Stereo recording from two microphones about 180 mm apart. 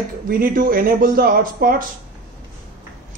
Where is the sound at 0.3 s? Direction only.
50° right (ahead or behind).